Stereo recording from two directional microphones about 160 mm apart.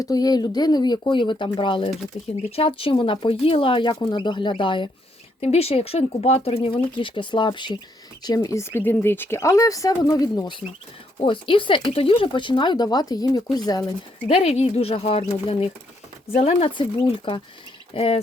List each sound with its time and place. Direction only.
0.0 s speech: 25° left (ahead or behind)
14.3 s speech: 40° left (ahead or behind)